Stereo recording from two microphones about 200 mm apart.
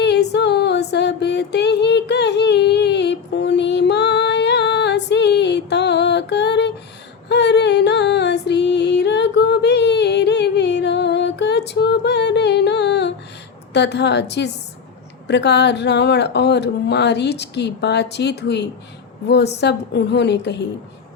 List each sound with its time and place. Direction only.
0.0 s music: 60° left (ahead or behind)
13.7 s speech: 60° left (ahead or behind)